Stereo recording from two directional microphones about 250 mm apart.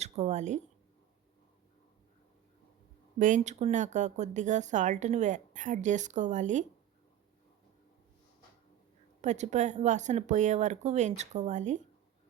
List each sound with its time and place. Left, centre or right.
0.0 s a sound: right
3.2 s speech: right
9.2 s speech: right